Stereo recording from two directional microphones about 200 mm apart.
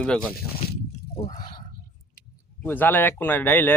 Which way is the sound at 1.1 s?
35° left (ahead or behind).